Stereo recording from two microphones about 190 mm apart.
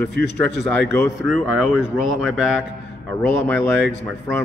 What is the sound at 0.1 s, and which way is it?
Speech, 65° left (ahead or behind).